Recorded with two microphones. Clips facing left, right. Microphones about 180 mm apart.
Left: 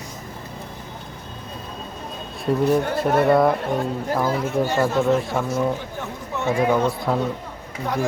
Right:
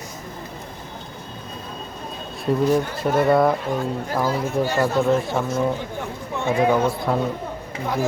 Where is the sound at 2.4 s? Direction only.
Centre (ahead or behind).